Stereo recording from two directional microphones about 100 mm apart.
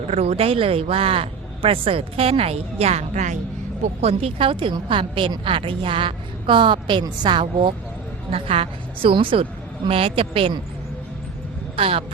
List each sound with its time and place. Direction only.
0.1 s speech: 85° right
4.0 s a woman's voice: 70° right (ahead or behind); by 7.7 s 50° right (ahead or behind)
8.3 s a woman's voice: 75° right (ahead or behind)
11.8 s speech: 70° right (ahead or behind)